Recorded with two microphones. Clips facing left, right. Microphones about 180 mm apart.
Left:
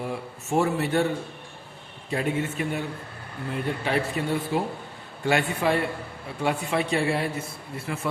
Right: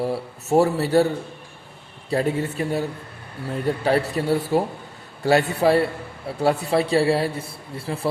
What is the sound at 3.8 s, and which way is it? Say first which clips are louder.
A man's voice: right 6 dB; 40° right (ahead or behind).